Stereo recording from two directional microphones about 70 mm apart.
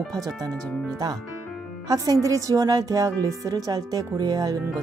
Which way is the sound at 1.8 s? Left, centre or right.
Right.